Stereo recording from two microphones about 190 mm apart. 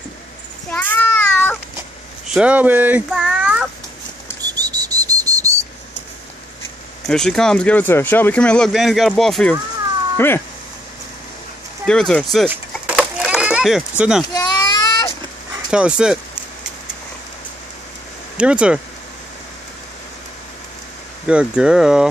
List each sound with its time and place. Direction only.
0.7 s child singing: 10° left (ahead or behind)
2.2 s speech: 5° right (ahead or behind)
4.4 s bird: 20° right (ahead or behind)
7.1 s speech: 5° left (ahead or behind)
11.8 s speech: 5° left (ahead or behind)
12.4 s children playing: 5° right (ahead or behind)
14.3 s baby cry: 20° left (ahead or behind)
15.7 s speech: 5° right (ahead or behind)
18.4 s speech: 5° right (ahead or behind)
21.3 s speech: 5° right (ahead or behind)